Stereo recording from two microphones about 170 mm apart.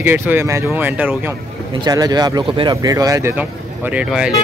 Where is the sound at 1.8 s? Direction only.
20° right (ahead or behind).